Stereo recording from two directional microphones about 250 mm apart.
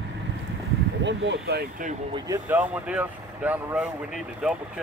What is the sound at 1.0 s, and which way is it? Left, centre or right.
Speech, right.